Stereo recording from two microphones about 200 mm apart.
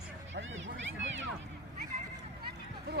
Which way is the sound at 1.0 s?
65° right (ahead or behind).